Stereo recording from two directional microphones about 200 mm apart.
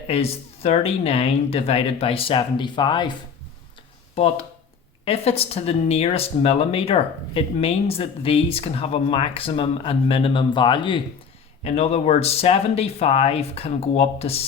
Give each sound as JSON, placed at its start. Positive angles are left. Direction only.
{"t": 0.1, "sound": "speech", "side_deg": 30}